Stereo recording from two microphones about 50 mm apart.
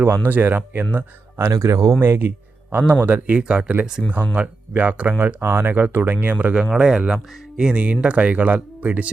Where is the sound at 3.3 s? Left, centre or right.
Right.